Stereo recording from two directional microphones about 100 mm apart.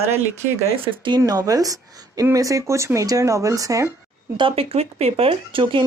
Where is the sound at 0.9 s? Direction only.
55° right (ahead or behind).